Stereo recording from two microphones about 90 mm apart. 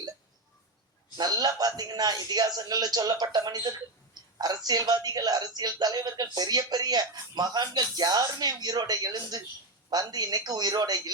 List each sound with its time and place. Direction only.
1.1 s speech: 50° right (ahead or behind)